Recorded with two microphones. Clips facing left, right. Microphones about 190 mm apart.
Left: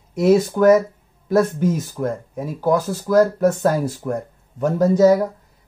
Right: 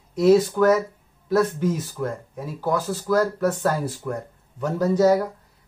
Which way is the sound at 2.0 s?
45° left (ahead or behind).